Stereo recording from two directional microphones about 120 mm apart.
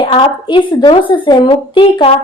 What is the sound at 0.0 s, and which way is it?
A woman's voice, 40° left (ahead or behind).